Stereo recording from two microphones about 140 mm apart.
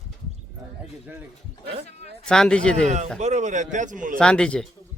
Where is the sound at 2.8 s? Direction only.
55° right (ahead or behind); by 4.2 s 70° right (ahead or behind).